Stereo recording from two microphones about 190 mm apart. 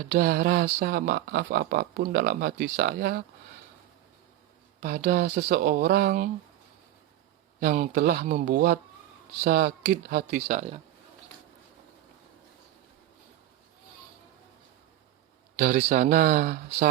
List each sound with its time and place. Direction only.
0.1 s speech: 50° right (ahead or behind)
4.8 s speech: 50° right (ahead or behind)
7.6 s speech: 45° right (ahead or behind)
8.2 s speech: 40° right (ahead or behind)
15.5 s speech: 45° right (ahead or behind)